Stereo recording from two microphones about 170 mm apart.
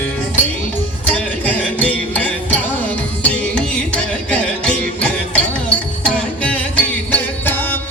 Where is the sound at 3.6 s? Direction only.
5° left (ahead or behind).